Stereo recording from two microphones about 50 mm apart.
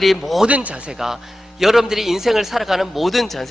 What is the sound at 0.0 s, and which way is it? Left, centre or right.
Speech, centre.